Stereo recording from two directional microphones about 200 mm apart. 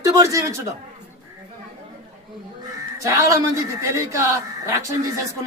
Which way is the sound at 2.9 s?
15° right (ahead or behind).